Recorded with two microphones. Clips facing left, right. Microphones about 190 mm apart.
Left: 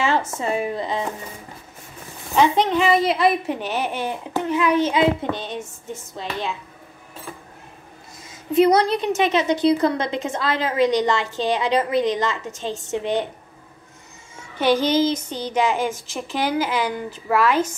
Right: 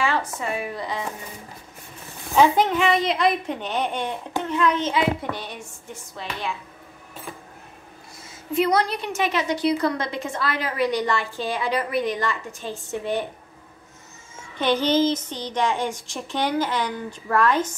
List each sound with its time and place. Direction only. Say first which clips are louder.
0.0 s speech: left 3 dB; 25° left (ahead or behind)
2.7 s a woman's voice: left 3 dB; centre (ahead or behind)
4.9 s a woman's voice: left 4 dB; 25° left (ahead or behind)
8.2 s a woman's voice: left 6 dB; 20° left (ahead or behind)
14.6 s a woman's voice: left 2 dB; 10° left (ahead or behind)